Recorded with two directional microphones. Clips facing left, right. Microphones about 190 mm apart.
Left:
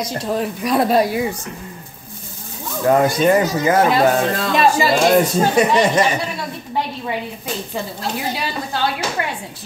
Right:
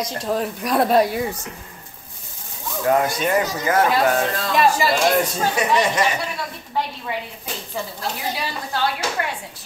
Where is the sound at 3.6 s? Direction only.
25° left (ahead or behind).